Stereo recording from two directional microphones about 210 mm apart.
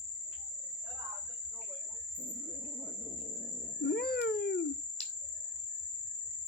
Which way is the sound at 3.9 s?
50° left (ahead or behind).